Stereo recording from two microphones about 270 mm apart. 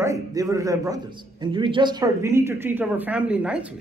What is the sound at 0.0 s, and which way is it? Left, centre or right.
A man's voice, centre.